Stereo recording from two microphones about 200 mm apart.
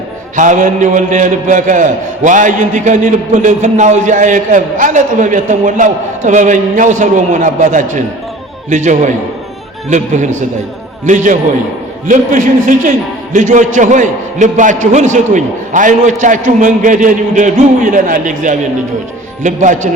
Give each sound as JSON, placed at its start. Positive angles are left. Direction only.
{"t": 0.3, "sound": "a man's voice", "side_deg": -40}